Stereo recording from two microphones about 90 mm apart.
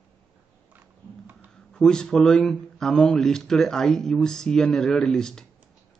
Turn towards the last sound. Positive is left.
turn(degrees=5)  # may be behind; listen again after turning